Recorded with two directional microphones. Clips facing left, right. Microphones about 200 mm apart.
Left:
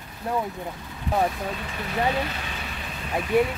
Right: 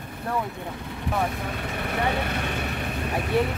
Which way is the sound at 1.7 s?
60° right (ahead or behind).